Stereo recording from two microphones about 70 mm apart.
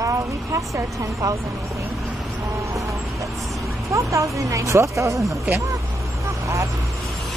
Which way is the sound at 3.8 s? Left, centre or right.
Right.